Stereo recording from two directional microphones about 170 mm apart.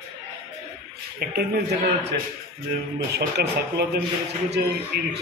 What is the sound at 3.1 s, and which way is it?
Speech, 75° right (ahead or behind).